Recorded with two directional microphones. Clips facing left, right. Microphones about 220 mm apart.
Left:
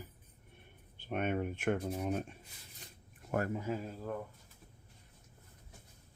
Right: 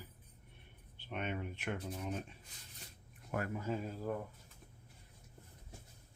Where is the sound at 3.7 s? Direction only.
Centre (ahead or behind).